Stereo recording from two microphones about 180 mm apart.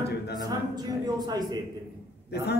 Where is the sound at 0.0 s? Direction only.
65° left (ahead or behind).